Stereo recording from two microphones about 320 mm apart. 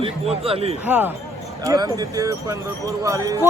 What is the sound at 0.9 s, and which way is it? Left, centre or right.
Speech, centre.